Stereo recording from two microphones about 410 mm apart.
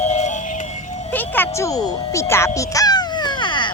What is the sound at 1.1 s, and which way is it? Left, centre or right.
Music, centre.